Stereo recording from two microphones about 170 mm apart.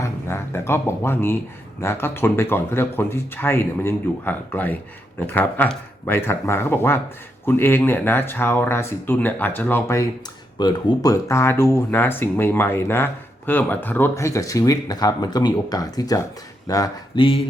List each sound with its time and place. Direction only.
0.0 s speech: 15° left (ahead or behind)